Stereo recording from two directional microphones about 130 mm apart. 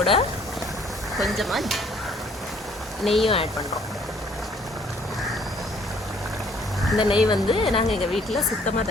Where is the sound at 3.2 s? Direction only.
45° left (ahead or behind).